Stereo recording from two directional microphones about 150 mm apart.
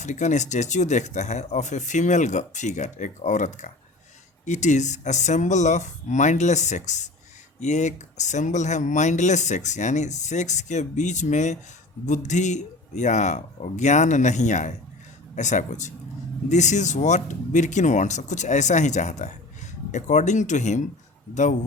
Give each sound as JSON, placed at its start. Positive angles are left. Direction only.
{"t": 0.0, "sound": "speech", "side_deg": 55}